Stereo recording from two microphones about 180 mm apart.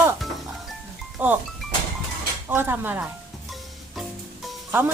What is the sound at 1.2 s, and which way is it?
Speech, 10° right (ahead or behind).